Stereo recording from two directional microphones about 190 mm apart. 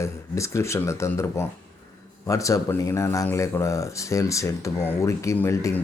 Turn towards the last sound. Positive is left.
turn(degrees=15)  # may be behind; listen again after turning